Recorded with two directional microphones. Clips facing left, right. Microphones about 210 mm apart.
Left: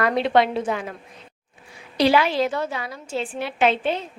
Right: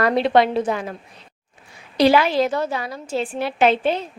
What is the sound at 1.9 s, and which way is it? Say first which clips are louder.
A woman's voice: right 3 dB; 45° right (ahead or behind).